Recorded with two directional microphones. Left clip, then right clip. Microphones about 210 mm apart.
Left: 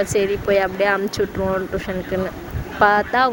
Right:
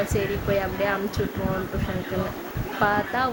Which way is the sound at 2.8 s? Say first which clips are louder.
Left 8 dB; 40° left (ahead or behind).